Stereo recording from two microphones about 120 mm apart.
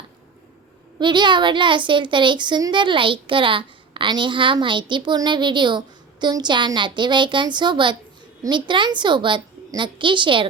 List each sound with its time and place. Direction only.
0.9 s speech: 40° right (ahead or behind)